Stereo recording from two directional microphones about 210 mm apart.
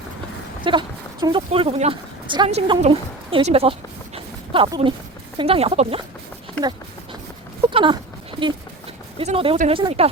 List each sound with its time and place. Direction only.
0.6 s speech: 25° right (ahead or behind)
6.6 s speech: 5° left (ahead or behind)
7.7 s speech: 25° right (ahead or behind)
9.1 s speech: 25° right (ahead or behind)